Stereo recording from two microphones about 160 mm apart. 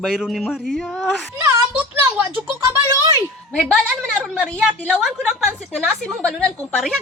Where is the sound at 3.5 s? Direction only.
5° left (ahead or behind).